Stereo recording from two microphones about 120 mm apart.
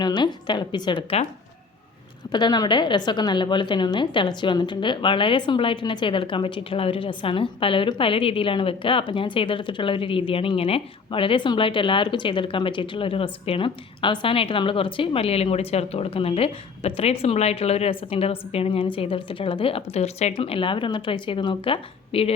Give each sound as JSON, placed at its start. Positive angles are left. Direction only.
{"t": 0.0, "sound": "a woman's voice", "side_deg": 40}
{"t": 2.3, "sound": "a woman's voice", "side_deg": 35}